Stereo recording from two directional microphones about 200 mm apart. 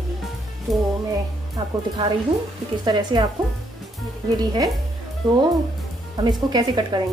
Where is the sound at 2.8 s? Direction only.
20° right (ahead or behind).